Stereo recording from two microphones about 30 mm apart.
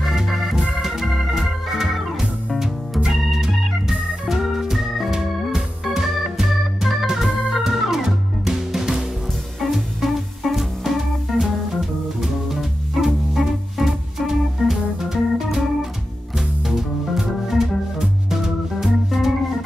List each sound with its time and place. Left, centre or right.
0.2 s organ: centre
1.8 s music: centre
3.0 s organ: centre
8.5 s music: centre
9.6 s music: centre
15.0 s organ: centre
16.3 s music: centre